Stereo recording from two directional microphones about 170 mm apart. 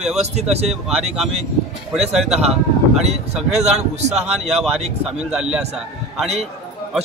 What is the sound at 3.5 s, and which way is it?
Speech, 40° right (ahead or behind).